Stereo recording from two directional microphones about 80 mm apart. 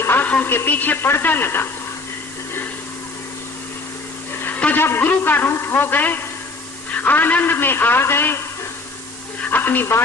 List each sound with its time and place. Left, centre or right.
0.0 s music: left
0.4 s a man's voice: left
4.4 s a man's voice: left
9.4 s speech: left